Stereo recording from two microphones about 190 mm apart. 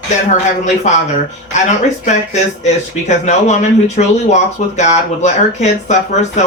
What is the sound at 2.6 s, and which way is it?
Speech, 35° left (ahead or behind).